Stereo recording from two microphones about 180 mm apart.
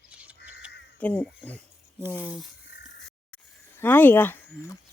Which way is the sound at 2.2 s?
5° right (ahead or behind).